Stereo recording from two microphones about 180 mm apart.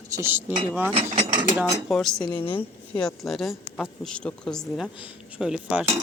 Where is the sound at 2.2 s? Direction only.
30° left (ahead or behind).